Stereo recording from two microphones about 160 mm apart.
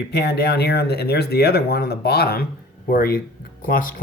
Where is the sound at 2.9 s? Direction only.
65° left (ahead or behind).